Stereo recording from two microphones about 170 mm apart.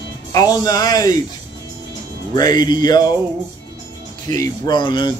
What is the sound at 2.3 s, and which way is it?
Speech, 25° left (ahead or behind).